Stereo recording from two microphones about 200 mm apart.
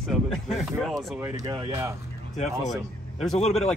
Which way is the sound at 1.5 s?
20° right (ahead or behind).